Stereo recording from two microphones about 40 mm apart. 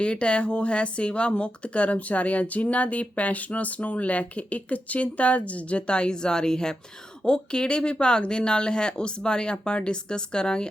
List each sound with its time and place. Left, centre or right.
0.0 s speech: left